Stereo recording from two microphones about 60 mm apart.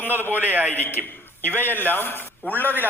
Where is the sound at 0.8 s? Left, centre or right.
Left.